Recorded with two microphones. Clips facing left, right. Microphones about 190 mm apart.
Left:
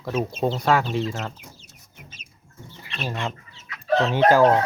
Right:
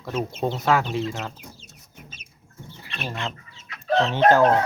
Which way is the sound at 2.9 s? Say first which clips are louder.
Left 2 dB; 20° left (ahead or behind).